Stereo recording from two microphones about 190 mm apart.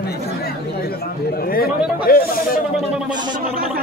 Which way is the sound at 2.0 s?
50° left (ahead or behind).